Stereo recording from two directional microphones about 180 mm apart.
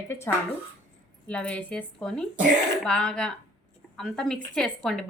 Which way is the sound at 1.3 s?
5° left (ahead or behind).